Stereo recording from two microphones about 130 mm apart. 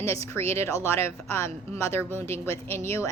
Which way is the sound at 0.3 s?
20° left (ahead or behind).